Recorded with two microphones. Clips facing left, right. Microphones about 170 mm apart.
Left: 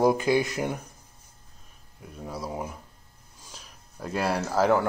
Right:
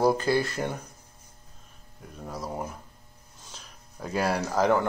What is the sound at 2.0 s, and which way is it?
Speech, 5° left (ahead or behind).